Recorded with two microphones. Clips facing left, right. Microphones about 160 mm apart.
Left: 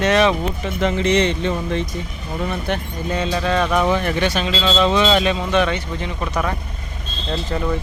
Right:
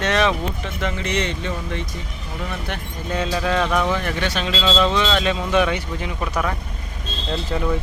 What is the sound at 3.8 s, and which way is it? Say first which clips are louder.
Speech: left 4 dB; 15° left (ahead or behind).